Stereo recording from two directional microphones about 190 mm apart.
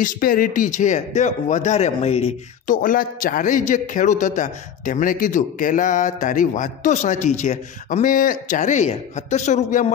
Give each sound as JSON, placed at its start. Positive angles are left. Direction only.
{"t": 0.0, "sound": "speech", "side_deg": 45}